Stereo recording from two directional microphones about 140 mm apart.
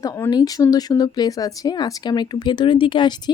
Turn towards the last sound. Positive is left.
turn(degrees=30)  # may be behind; listen again after turning